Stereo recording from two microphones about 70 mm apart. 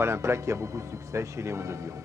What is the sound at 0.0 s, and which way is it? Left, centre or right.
A man's voice, right.